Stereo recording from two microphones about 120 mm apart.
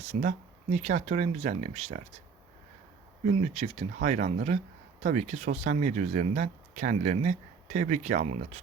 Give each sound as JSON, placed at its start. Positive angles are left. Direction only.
{"t": 0.0, "sound": "speech", "side_deg": -75}
{"t": 3.2, "sound": "speech", "side_deg": -65}